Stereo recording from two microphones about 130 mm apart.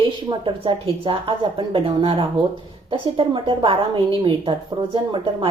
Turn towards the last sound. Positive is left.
turn(degrees=-35)  # may be behind; listen again after turning